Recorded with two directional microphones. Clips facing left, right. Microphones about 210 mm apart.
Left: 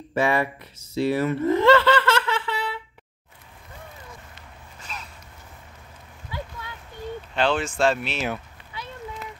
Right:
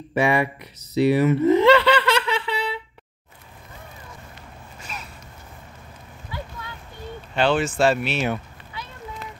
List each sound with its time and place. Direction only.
0.1 s speech: 15° right (ahead or behind)
1.0 s snicker: 15° right (ahead or behind)
7.3 s speech: 5° right (ahead or behind)